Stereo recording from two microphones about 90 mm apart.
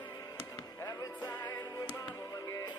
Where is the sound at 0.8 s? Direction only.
40° left (ahead or behind).